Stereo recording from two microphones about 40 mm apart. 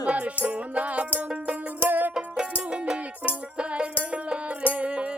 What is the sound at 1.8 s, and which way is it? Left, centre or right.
Music, right.